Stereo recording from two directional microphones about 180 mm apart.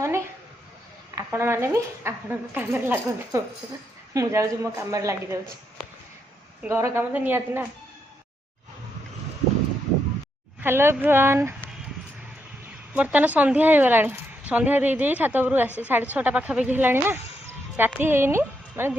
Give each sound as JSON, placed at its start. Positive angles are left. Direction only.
{"t": 1.1, "sound": "speech", "side_deg": -15}
{"t": 6.6, "sound": "speech", "side_deg": -15}
{"t": 10.6, "sound": "speech", "side_deg": -10}
{"t": 12.9, "sound": "speech", "side_deg": -5}